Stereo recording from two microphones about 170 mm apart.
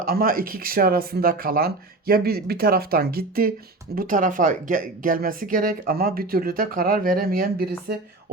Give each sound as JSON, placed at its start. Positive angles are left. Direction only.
{"t": 0.0, "sound": "speech", "side_deg": -60}